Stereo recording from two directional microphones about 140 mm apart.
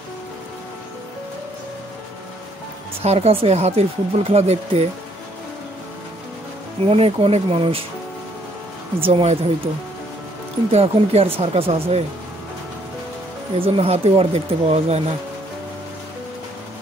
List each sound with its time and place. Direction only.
3.0 s speech: 50° right (ahead or behind)
6.8 s speech: 45° right (ahead or behind)
9.0 s speech: 45° right (ahead or behind)
10.7 s speech: 50° right (ahead or behind)
13.6 s speech: 45° right (ahead or behind)